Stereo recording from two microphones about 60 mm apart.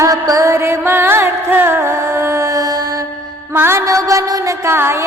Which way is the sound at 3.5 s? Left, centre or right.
Right.